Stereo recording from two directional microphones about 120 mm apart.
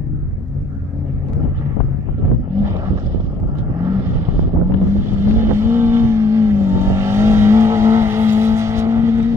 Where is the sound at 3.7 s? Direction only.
25° right (ahead or behind).